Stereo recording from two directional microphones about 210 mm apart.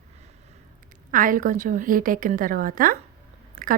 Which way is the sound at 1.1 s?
40° right (ahead or behind).